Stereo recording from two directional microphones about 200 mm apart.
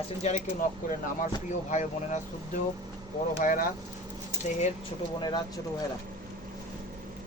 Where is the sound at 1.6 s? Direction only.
35° left (ahead or behind).